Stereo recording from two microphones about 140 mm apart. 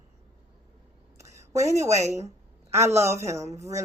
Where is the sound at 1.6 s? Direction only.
55° right (ahead or behind).